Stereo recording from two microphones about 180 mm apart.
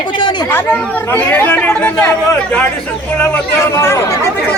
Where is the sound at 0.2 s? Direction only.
25° left (ahead or behind).